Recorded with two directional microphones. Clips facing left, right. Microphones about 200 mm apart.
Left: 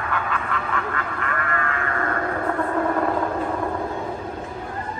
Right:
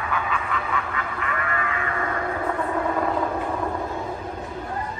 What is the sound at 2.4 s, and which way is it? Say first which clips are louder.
Train: left 3 dB; 5° right (ahead or behind).